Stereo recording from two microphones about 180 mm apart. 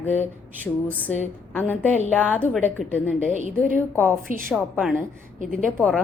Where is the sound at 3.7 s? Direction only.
10° right (ahead or behind).